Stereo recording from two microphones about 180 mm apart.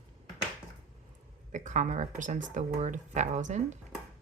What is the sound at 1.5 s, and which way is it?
Speech, 45° right (ahead or behind).